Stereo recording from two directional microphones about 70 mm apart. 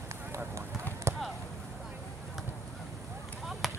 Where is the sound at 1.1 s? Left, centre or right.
Right.